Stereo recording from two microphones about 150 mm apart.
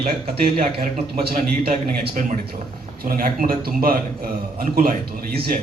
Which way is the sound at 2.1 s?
55° right (ahead or behind).